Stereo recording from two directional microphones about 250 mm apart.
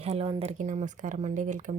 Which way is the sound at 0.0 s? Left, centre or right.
Right.